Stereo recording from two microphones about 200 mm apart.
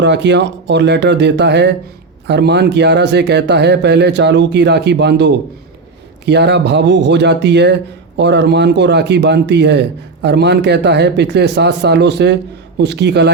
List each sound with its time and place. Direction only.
0.0 s speech: 60° right (ahead or behind)